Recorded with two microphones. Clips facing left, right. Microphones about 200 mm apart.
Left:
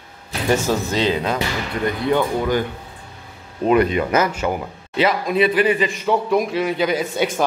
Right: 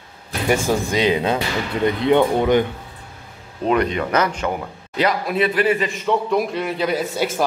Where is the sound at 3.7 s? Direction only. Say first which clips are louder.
Left 3 dB; 5° left (ahead or behind).